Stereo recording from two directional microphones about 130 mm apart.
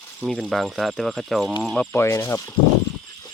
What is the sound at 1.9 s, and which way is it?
Speech, 20° left (ahead or behind).